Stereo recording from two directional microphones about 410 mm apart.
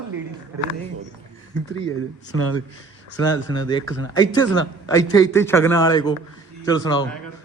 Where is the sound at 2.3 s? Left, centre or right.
Left.